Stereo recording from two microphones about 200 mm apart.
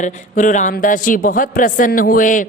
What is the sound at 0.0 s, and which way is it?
A woman's voice, 40° left (ahead or behind).